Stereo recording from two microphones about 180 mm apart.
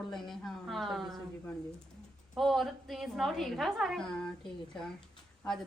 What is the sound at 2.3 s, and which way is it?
A woman's voice, centre (ahead or behind).